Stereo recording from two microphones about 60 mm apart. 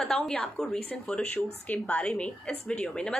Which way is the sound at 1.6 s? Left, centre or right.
Left.